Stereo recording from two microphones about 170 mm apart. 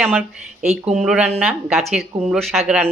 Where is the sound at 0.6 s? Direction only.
40° right (ahead or behind).